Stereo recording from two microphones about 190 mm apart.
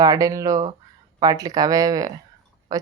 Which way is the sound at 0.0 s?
20° right (ahead or behind).